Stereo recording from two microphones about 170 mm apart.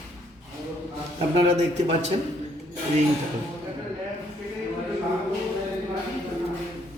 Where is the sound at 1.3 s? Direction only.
40° right (ahead or behind).